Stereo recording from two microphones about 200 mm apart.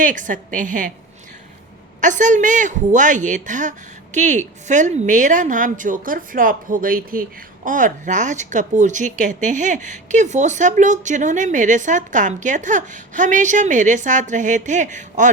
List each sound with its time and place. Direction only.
0.0 s a woman's voice: 40° right (ahead or behind)
2.0 s a woman's voice: 40° right (ahead or behind)